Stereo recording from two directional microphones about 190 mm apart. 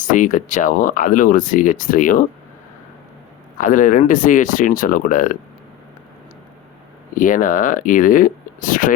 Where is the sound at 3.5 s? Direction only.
45° left (ahead or behind).